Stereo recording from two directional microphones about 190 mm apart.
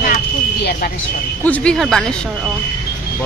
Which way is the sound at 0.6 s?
55° left (ahead or behind).